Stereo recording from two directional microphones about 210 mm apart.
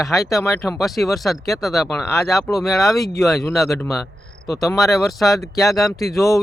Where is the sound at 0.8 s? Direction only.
Centre (ahead or behind).